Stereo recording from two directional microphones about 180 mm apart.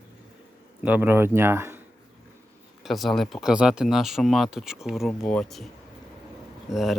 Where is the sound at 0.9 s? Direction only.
10° right (ahead or behind).